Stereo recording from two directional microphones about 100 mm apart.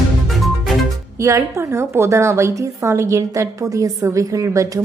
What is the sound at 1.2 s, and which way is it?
A woman's voice, 30° right (ahead or behind).